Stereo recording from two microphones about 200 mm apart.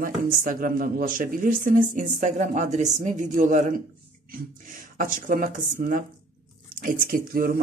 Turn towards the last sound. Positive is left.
turn(degrees=-45)  # may be behind; listen again after turning